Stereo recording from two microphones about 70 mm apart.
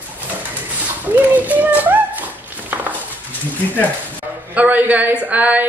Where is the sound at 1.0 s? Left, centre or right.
Right.